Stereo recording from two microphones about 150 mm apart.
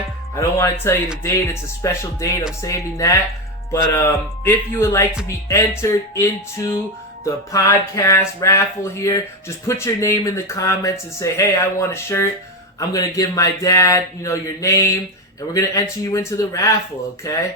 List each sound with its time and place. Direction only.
0.3 s speech: 15° left (ahead or behind)